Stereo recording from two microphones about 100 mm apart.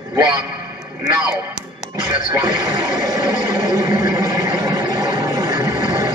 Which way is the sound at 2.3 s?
45° right (ahead or behind).